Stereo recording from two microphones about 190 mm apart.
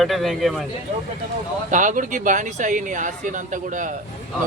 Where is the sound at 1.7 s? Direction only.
45° right (ahead or behind).